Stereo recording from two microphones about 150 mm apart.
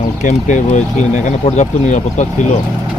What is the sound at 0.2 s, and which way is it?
Speech, 55° left (ahead or behind).